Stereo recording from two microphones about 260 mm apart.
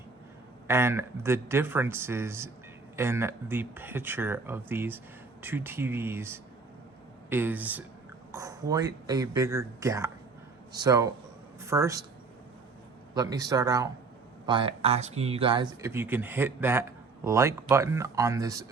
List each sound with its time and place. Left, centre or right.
0.7 s speech: centre
13.1 s speech: centre